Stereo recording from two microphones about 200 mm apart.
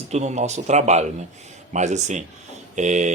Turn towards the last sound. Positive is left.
turn(degrees=-35)  # may be behind; listen again after turning